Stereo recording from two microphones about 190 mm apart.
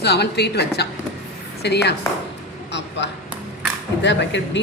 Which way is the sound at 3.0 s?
65° left (ahead or behind).